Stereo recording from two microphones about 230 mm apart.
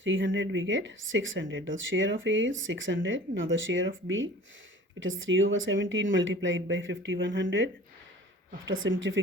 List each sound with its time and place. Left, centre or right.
0.0 s speech: right
8.6 s speech: right